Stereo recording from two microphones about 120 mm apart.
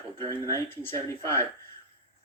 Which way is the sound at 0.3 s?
25° left (ahead or behind).